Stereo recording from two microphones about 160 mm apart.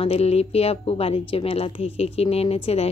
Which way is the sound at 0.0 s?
40° left (ahead or behind).